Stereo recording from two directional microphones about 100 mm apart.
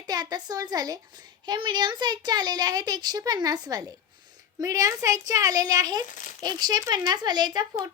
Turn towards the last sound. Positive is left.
turn(degrees=-45)  # may be behind; listen again after turning